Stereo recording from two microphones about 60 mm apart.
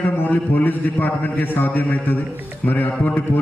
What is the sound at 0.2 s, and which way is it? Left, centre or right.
A man's voice, left.